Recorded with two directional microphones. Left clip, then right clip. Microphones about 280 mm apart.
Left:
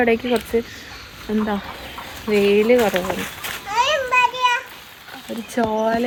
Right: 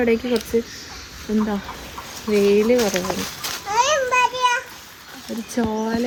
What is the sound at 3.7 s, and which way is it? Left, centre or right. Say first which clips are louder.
Children playing: even; right.